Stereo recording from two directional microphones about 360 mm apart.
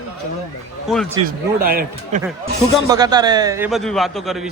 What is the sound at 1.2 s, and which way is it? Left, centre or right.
Speech, right.